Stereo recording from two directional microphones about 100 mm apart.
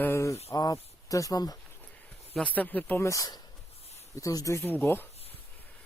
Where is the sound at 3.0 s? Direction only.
35° left (ahead or behind).